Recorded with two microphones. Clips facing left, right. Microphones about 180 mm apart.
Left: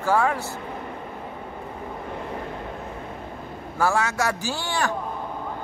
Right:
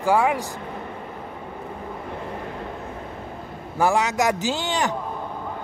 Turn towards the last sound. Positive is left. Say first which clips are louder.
# right 3 dB
turn(degrees=-20)  # may be behind; listen again after turning